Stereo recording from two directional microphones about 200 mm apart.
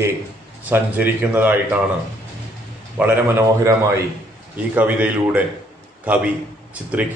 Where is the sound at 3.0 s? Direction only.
15° right (ahead or behind).